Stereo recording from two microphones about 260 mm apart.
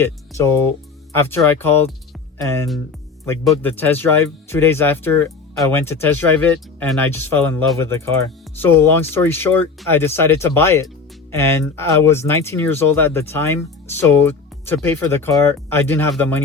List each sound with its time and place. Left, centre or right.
0.0 s speech: centre